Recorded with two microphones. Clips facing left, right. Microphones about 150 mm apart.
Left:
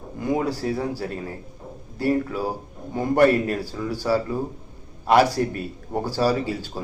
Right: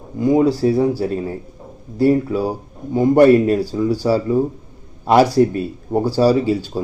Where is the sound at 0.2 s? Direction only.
20° right (ahead or behind).